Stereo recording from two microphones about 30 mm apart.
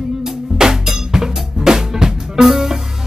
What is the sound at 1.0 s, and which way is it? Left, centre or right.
Drum, centre.